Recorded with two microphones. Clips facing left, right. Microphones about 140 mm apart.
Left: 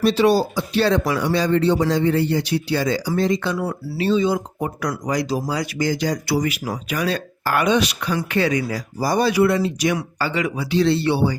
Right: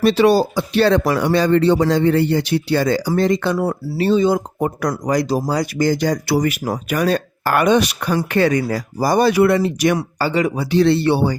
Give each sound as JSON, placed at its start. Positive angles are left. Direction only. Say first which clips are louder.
{"t": 0.0, "sound": "speech", "louder": "right 3 dB", "side_deg": -65}
{"t": 3.6, "sound": "speech", "louder": "right 4 dB", "side_deg": -45}
{"t": 10.2, "sound": "speech", "louder": "right 4 dB", "side_deg": -35}